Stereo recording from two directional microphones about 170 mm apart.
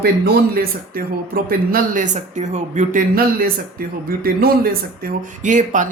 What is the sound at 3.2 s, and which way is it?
Speech, 60° right (ahead or behind).